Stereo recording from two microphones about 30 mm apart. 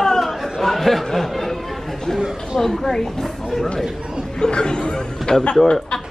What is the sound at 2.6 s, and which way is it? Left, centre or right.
Speech, centre.